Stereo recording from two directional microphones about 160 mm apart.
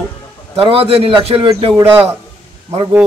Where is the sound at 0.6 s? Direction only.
35° right (ahead or behind).